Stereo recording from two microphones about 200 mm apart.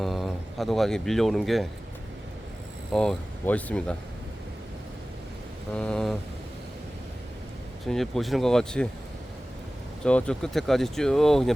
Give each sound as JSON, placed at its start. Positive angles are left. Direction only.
{"t": 0.0, "sound": "speech", "side_deg": 0}
{"t": 2.9, "sound": "speech", "side_deg": 5}
{"t": 5.7, "sound": "speech", "side_deg": 5}
{"t": 7.9, "sound": "speech", "side_deg": 0}
{"t": 10.0, "sound": "speech", "side_deg": 5}